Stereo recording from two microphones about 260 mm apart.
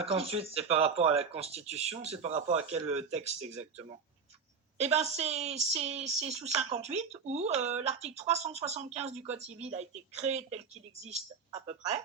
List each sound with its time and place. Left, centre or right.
0.0 s speech: right